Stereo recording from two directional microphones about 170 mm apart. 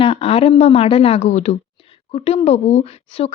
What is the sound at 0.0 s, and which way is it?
A woman's voice, 30° left (ahead or behind).